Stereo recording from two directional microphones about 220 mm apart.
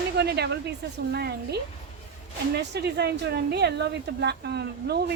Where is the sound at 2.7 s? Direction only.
50° right (ahead or behind).